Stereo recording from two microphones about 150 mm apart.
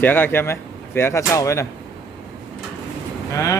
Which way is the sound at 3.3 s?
20° left (ahead or behind).